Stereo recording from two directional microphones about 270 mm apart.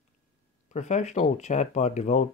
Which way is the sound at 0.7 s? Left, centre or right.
Left.